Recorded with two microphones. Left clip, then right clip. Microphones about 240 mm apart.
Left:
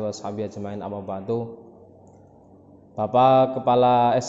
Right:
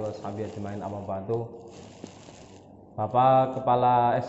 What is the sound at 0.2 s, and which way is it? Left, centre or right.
Speech, left.